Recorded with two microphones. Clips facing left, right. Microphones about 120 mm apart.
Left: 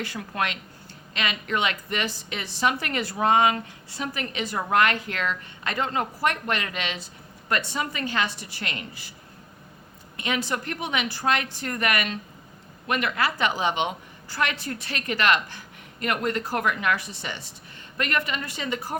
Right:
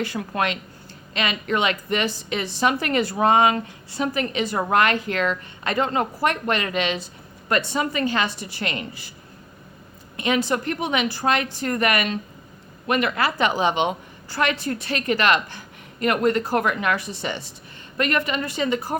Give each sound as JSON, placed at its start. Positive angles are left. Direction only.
{"t": 0.0, "sound": "a woman's voice", "side_deg": -25}
{"t": 10.2, "sound": "a woman's voice", "side_deg": -25}